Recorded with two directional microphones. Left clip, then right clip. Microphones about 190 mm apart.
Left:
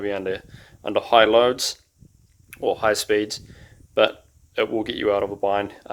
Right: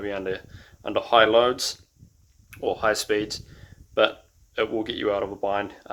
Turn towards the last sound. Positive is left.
turn(degrees=35)  # may be behind; listen again after turning